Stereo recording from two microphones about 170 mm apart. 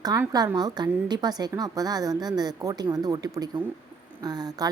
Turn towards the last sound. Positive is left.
turn(degrees=-25)  # may be behind; listen again after turning